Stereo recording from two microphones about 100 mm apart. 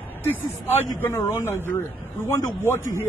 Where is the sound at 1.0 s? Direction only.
25° left (ahead or behind).